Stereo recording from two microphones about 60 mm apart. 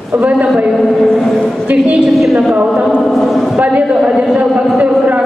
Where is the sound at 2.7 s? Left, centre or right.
Centre.